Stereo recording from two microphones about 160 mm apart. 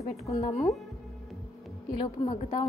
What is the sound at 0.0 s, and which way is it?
Speech, 45° left (ahead or behind).